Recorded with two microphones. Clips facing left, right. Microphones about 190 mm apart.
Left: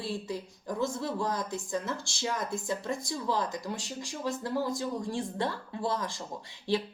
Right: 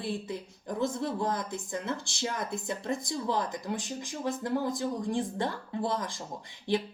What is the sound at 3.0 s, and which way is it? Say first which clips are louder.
Speech: right 1 dB; 55° right (ahead or behind).